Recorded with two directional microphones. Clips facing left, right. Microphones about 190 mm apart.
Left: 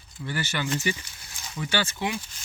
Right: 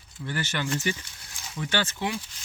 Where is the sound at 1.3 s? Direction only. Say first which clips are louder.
Even; centre (ahead or behind).